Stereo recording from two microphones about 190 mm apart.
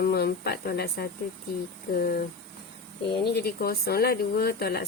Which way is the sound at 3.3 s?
55° left (ahead or behind).